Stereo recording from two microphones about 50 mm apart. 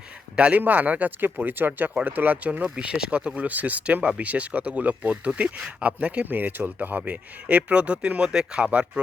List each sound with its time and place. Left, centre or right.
0.3 s speech: right
2.6 s speech: centre
6.2 s speech: right
8.3 s speech: centre